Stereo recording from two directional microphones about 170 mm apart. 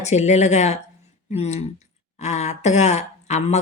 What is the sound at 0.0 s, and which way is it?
Speech, 40° left (ahead or behind).